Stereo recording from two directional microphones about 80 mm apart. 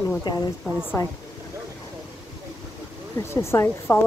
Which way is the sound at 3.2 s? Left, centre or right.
Left.